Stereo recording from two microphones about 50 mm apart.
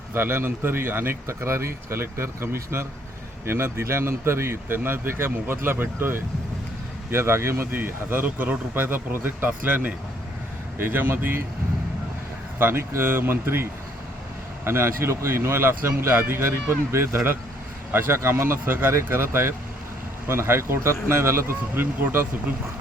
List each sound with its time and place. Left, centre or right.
0.1 s speech: right
1.3 s speech: right
9.6 s speech: right
10.8 s speech: right
12.5 s speech: right
22.0 s speech: right